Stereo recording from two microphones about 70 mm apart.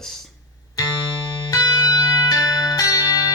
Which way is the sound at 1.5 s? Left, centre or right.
Left.